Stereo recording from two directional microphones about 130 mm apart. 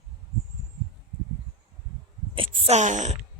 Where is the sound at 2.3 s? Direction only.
40° right (ahead or behind).